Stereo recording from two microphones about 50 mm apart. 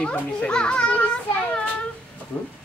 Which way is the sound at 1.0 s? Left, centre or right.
Left.